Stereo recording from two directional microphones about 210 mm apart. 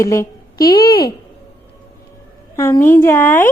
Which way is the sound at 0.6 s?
45° left (ahead or behind).